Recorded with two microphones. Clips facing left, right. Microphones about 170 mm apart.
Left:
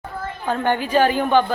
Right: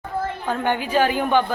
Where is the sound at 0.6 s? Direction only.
10° right (ahead or behind).